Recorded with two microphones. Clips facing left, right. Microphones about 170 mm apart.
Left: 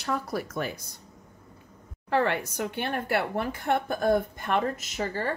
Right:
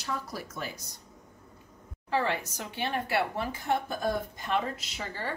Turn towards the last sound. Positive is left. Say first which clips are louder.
# left 7 dB
turn(degrees=45)  # may be behind; listen again after turning